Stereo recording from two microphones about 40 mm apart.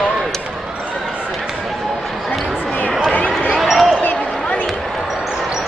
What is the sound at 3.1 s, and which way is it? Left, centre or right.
Basketball bounce, left.